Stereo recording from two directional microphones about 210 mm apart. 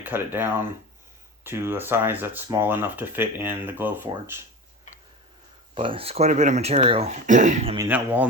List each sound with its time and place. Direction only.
0.0 s speech: 10° right (ahead or behind)
5.7 s speech: 25° right (ahead or behind)
7.8 s speech: 10° right (ahead or behind)